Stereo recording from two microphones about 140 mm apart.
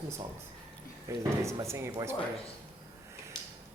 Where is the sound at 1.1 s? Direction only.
20° right (ahead or behind).